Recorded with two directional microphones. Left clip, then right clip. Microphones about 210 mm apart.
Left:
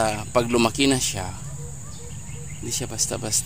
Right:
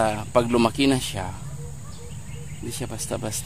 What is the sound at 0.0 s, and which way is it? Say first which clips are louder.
Speech: right 1 dB; 15° right (ahead or behind).